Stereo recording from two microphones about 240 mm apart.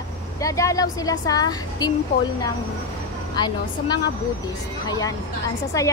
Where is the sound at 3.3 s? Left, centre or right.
Centre.